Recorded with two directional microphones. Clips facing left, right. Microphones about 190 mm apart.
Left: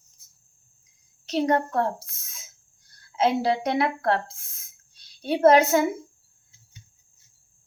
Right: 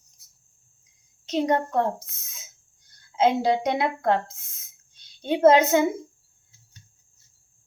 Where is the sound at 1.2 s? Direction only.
15° right (ahead or behind).